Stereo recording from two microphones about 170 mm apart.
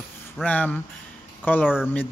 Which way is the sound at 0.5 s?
10° left (ahead or behind).